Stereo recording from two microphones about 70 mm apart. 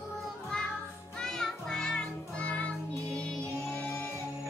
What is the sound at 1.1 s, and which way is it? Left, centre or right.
Music, centre.